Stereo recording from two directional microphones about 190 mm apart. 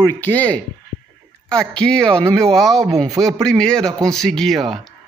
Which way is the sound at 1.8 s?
5° left (ahead or behind).